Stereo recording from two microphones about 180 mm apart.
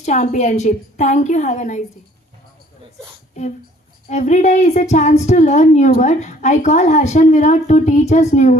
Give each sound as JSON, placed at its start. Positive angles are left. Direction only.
{"t": 0.0, "sound": "a woman's voice", "side_deg": 40}
{"t": 4.1, "sound": "a woman's voice", "side_deg": 40}